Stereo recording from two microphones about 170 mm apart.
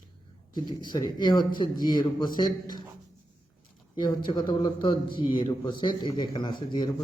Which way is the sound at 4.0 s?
25° left (ahead or behind).